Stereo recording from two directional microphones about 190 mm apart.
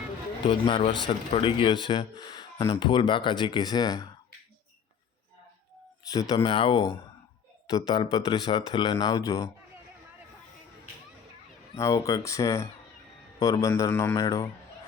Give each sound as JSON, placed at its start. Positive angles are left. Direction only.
{"t": 0.4, "sound": "speech", "side_deg": 25}
{"t": 6.1, "sound": "speech", "side_deg": 20}
{"t": 11.8, "sound": "a man's voice", "side_deg": 20}